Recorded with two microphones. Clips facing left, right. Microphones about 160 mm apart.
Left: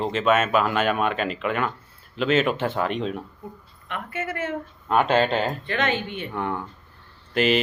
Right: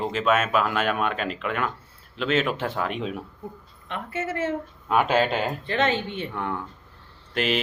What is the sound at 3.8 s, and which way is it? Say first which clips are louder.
Speech: right 1 dB; 30° right (ahead or behind).